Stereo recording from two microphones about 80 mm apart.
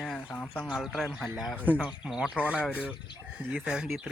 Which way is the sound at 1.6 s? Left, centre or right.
Right.